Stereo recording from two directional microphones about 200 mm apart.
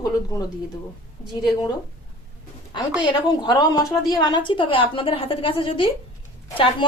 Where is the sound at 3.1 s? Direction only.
20° left (ahead or behind).